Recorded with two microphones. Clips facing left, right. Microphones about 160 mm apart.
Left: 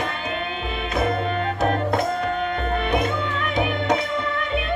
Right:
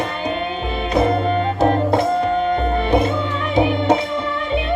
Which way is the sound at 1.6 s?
30° right (ahead or behind).